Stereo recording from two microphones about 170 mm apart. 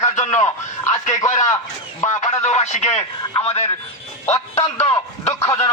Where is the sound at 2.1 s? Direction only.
40° left (ahead or behind).